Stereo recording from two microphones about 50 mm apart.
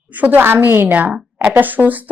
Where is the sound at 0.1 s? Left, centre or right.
Right.